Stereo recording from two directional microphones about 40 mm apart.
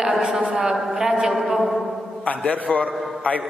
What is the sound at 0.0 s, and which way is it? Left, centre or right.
A woman's voice, centre.